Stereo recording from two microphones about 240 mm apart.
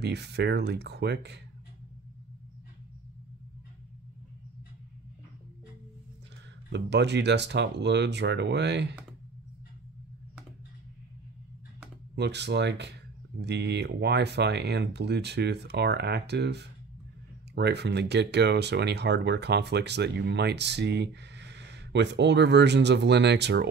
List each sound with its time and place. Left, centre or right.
0.0 s speech: right
6.7 s speech: right
12.2 s speech: right